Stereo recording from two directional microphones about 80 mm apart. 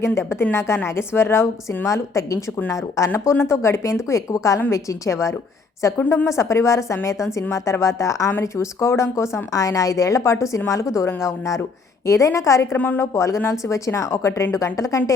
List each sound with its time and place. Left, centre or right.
0.0 s a woman's voice: left
8.3 s a woman's voice: left
12.7 s a woman's voice: centre
13.0 s a woman's voice: left